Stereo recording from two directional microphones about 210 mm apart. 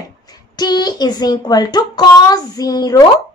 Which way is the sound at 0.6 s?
20° left (ahead or behind).